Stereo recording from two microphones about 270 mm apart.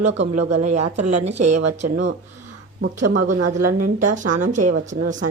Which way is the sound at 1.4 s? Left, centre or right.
Right.